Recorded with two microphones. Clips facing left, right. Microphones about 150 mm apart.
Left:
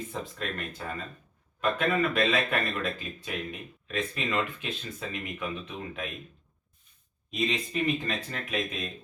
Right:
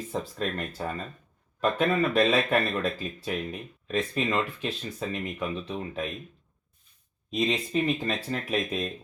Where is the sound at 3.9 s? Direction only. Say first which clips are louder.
Right 4 dB; 35° right (ahead or behind).